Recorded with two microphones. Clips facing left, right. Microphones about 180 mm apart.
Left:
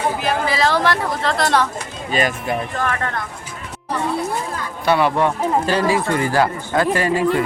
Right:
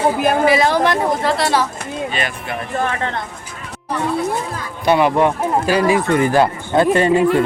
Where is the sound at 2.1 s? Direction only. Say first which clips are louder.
Left 4 dB; 40° left (ahead or behind).